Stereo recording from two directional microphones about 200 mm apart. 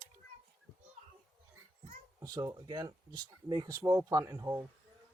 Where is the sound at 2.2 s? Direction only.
20° right (ahead or behind).